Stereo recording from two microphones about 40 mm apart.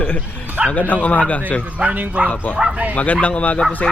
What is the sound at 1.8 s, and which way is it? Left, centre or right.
Speech, right.